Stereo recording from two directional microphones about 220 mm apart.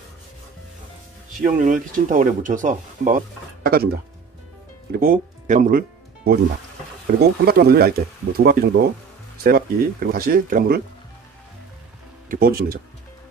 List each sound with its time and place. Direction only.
1.6 s speech: 35° right (ahead or behind)
4.9 s speech: 40° right (ahead or behind)
12.3 s speech: 40° right (ahead or behind)